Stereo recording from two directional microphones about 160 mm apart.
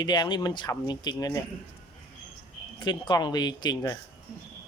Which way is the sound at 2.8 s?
30° left (ahead or behind).